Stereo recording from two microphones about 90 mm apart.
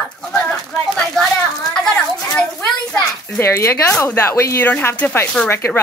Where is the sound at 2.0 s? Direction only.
10° left (ahead or behind).